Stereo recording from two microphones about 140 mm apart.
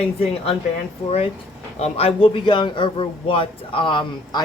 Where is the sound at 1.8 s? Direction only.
45° left (ahead or behind).